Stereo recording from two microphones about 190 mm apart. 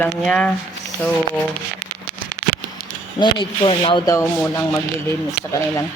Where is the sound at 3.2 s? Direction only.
25° left (ahead or behind).